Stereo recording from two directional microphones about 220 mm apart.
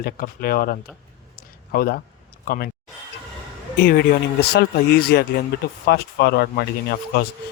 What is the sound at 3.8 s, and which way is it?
Speech, 45° left (ahead or behind).